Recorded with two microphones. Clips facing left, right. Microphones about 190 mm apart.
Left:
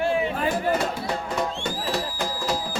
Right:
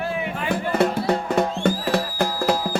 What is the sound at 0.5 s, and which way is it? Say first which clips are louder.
Music: right 4 dB; 60° right (ahead or behind).